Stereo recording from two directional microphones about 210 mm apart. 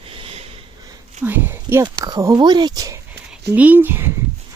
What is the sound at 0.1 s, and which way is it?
Sniff, 25° right (ahead or behind).